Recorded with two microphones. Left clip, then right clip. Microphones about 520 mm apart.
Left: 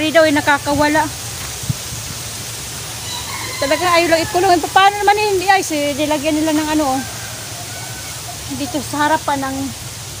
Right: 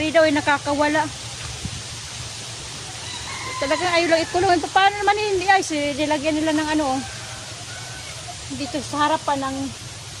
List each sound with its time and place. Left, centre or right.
0.0 s speech: right
3.6 s speech: right
8.9 s speech: right